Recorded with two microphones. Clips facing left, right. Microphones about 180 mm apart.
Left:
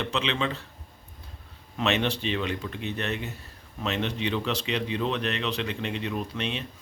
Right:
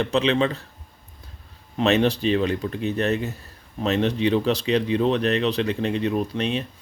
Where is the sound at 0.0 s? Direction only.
40° right (ahead or behind).